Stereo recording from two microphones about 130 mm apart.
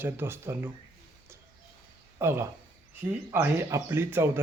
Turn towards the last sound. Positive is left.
turn(degrees=-20)  # may be behind; listen again after turning